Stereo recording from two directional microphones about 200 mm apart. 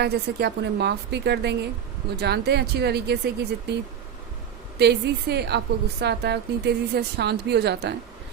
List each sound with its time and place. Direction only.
0.0 s a woman's voice: 55° right (ahead or behind)
4.8 s a woman's voice: 55° right (ahead or behind)